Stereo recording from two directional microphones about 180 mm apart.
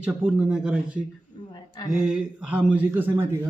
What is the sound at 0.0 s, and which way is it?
Speech, 5° right (ahead or behind).